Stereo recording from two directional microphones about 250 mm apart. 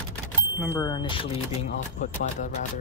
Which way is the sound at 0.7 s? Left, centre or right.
Centre.